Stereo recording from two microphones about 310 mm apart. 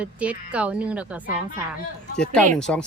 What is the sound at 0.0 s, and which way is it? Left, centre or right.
Speech, centre.